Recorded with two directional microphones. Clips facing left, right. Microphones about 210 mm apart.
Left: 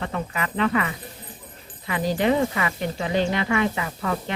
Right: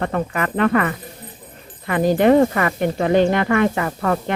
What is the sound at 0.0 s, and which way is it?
Speech, 55° right (ahead or behind).